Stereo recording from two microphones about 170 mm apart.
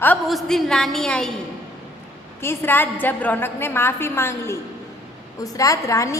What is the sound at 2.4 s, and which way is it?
A woman's voice, 15° left (ahead or behind).